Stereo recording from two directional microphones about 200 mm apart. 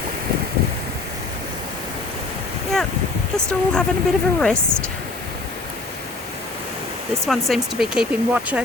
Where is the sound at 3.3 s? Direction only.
5° left (ahead or behind).